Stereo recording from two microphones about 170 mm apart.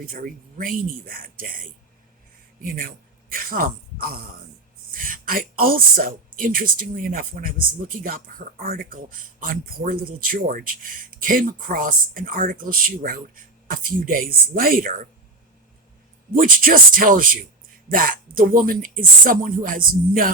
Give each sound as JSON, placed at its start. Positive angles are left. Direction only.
{"t": 0.0, "sound": "speech", "side_deg": -55}
{"t": 2.6, "sound": "speech", "side_deg": -55}
{"t": 16.3, "sound": "speech", "side_deg": -55}